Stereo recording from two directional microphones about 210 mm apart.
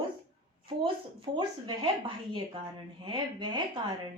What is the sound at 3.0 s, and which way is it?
Speech, 20° right (ahead or behind).